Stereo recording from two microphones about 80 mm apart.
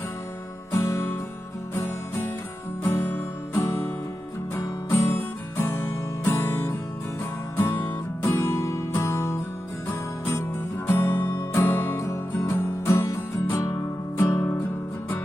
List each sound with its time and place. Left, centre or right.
0.7 s music: left
4.5 s music: left
10.8 s music: left